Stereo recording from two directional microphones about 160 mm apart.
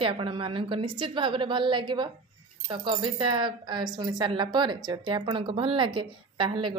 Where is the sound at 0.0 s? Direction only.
35° right (ahead or behind).